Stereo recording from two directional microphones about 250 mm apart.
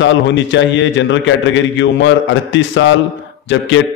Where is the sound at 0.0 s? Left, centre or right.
Left.